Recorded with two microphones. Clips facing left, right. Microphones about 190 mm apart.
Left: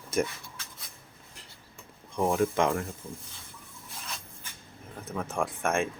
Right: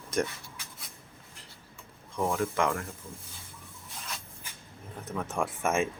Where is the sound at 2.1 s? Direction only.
20° left (ahead or behind).